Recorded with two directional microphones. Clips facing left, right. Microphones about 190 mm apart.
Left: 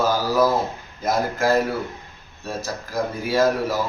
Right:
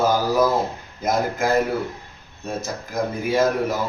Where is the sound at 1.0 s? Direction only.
20° right (ahead or behind).